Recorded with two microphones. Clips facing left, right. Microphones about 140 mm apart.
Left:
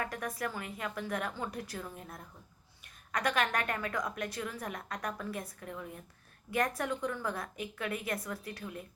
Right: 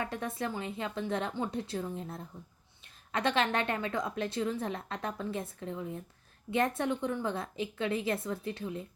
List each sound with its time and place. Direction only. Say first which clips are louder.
0.0 s a woman's voice: right 2 dB; 25° right (ahead or behind)